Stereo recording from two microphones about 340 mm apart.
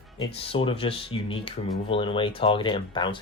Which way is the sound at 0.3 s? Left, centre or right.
Centre.